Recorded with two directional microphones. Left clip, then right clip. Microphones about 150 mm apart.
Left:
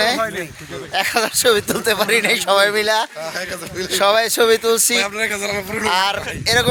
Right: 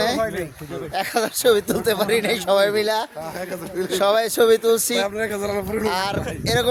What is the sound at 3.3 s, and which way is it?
Speech, 65° right (ahead or behind).